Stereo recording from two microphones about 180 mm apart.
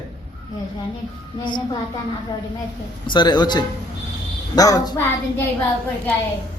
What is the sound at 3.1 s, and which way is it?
A woman's voice, 25° left (ahead or behind).